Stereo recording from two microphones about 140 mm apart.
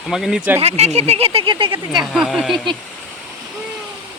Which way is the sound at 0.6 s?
50° right (ahead or behind).